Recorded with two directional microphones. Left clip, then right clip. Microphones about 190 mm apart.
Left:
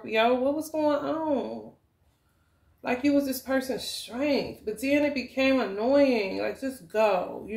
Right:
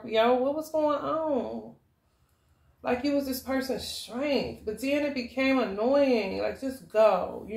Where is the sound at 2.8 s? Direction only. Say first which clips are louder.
Left 2 dB; 35° left (ahead or behind).